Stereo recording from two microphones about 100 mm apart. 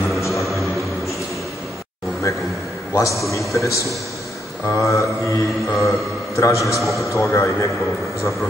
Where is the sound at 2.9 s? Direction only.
30° left (ahead or behind).